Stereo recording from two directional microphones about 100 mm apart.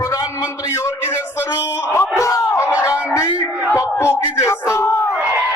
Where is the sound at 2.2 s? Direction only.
30° left (ahead or behind).